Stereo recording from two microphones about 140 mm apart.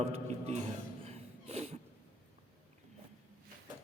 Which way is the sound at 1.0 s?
45° right (ahead or behind).